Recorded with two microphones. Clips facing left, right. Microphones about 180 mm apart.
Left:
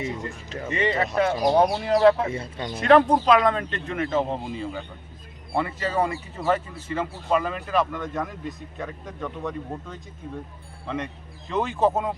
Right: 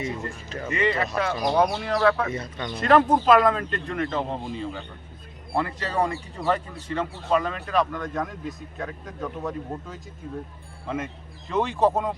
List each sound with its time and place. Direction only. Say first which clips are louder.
0.2 s speech: even; 20° left (ahead or behind)
2.8 s speech: left 1 dB; centre (ahead or behind)